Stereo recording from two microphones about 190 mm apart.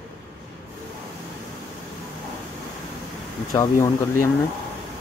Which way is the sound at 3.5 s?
15° left (ahead or behind).